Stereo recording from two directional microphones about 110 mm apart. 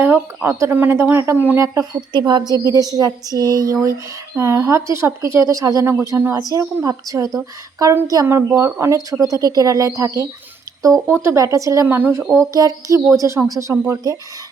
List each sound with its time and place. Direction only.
0.4 s speech: 20° right (ahead or behind)
2.1 s a woman's voice: 45° right (ahead or behind)